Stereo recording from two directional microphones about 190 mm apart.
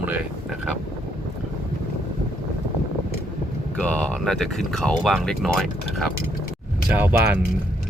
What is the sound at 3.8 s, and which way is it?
Speech, 5° left (ahead or behind).